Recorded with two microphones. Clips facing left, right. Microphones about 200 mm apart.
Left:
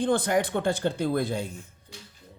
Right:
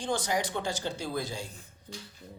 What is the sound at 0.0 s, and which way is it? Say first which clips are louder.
Speech: left 7 dB; 55° left (ahead or behind).